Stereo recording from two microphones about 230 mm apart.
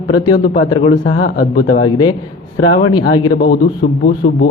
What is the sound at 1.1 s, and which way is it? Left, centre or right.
Speech, left.